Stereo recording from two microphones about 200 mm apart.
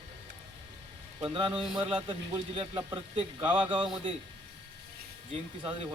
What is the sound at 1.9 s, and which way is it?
Speech, 25° right (ahead or behind).